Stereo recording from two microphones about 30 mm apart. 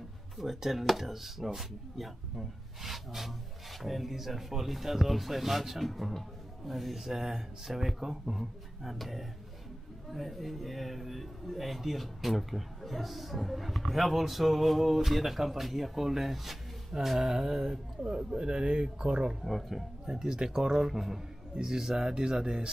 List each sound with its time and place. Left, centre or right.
0.4 s a man's voice: centre
7.2 s a man's voice: centre
17.4 s speech: right
19.4 s a man's voice: centre
20.1 s speech: right